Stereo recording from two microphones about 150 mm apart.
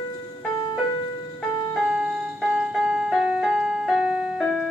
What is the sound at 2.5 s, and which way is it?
Music, centre (ahead or behind).